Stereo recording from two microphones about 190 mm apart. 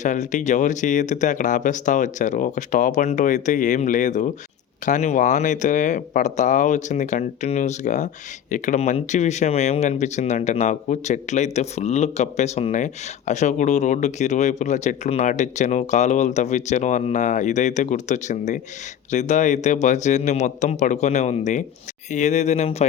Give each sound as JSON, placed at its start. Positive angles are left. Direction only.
{"t": 0.0, "sound": "speech", "side_deg": 40}